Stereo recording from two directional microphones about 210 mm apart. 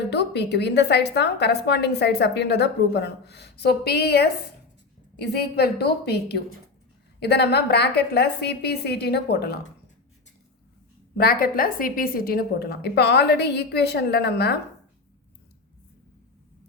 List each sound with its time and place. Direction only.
0.1 s a woman's voice: 55° left (ahead or behind)
11.2 s a woman's voice: 45° left (ahead or behind)